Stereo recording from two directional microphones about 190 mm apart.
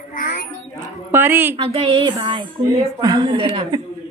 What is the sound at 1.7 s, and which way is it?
A woman's voice, 25° right (ahead or behind).